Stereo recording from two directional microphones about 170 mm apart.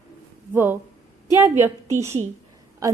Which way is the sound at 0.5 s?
10° right (ahead or behind).